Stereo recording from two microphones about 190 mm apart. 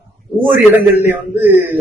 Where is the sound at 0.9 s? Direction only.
10° right (ahead or behind).